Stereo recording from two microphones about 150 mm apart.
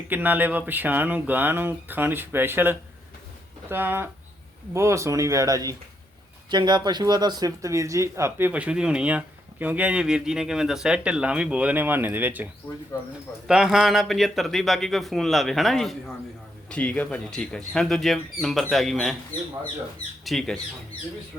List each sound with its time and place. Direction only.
0.1 s speech: 10° right (ahead or behind)
13.5 s a man's voice: 5° right (ahead or behind)
20.2 s a man's voice: centre (ahead or behind)